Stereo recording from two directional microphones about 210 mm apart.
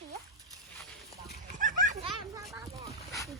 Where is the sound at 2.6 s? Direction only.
15° right (ahead or behind).